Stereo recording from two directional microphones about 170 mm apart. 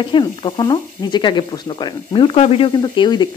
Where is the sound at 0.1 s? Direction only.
30° left (ahead or behind).